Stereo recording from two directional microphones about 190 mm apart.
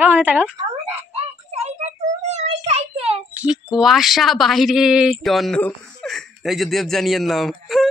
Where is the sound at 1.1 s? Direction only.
35° right (ahead or behind).